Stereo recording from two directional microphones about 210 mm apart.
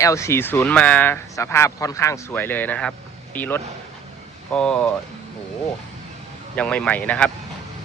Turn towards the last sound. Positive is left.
turn(degrees=5)  # may be behind; listen again after turning